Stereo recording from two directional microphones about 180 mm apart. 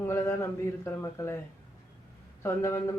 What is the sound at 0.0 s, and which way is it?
A man's voice, 15° left (ahead or behind).